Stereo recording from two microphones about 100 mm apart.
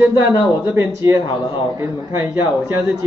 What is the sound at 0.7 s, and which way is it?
Speech, 30° right (ahead or behind).